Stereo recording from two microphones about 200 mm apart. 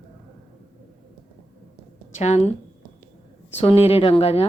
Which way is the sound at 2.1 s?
30° left (ahead or behind).